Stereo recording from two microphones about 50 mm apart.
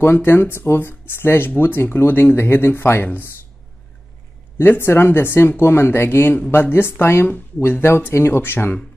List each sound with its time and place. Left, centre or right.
0.0 s speech: left
4.6 s speech: left